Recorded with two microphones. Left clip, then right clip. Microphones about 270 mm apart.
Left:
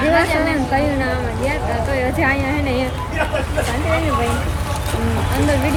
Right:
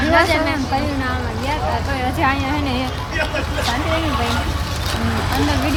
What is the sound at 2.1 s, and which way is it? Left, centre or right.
Speech, centre.